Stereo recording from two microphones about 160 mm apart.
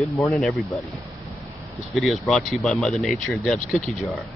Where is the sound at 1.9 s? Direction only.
Centre (ahead or behind).